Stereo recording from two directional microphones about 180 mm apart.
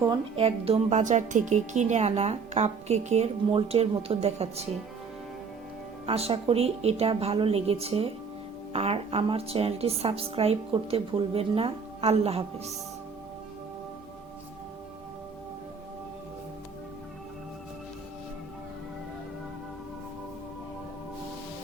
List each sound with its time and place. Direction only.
0.0 s a woman's voice: 30° right (ahead or behind)
6.1 s a woman's voice: 35° right (ahead or behind)